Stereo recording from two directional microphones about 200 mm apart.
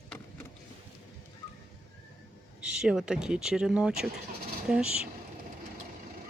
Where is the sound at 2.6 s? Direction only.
5° right (ahead or behind).